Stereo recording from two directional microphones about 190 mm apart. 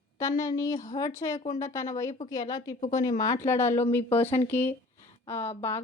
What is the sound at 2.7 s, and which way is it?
Speech, 40° left (ahead or behind).